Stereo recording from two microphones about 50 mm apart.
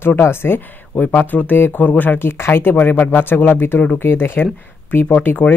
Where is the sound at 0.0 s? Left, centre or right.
Left.